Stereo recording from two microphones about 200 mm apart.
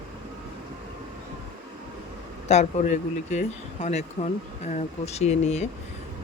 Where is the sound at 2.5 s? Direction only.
35° left (ahead or behind).